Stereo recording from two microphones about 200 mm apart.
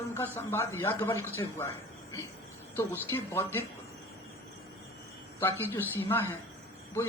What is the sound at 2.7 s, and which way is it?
Speech, 10° left (ahead or behind).